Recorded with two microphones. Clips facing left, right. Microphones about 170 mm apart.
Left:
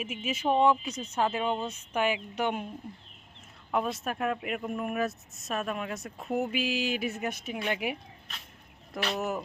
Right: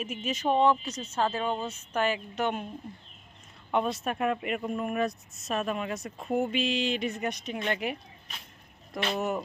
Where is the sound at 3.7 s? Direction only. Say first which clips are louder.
Right 2 dB; centre (ahead or behind).